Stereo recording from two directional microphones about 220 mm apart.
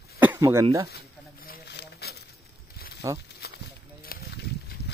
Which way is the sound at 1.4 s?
50° left (ahead or behind).